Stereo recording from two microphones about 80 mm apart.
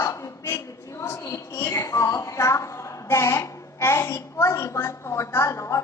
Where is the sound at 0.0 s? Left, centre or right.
Left.